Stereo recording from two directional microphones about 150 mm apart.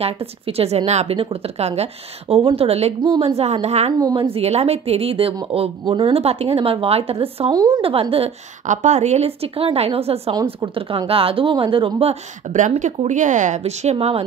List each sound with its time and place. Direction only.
0.0 s a woman's voice: 40° right (ahead or behind)
4.0 s a woman's voice: 30° right (ahead or behind)
7.5 s a woman's voice: 25° right (ahead or behind)
8.6 s a woman's voice: 50° right (ahead or behind)